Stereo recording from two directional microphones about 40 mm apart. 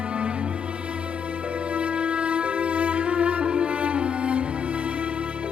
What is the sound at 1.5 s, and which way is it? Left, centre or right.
Music, right.